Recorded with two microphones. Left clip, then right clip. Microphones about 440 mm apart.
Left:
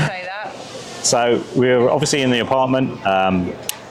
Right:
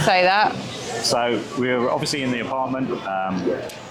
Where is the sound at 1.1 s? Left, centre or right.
Left.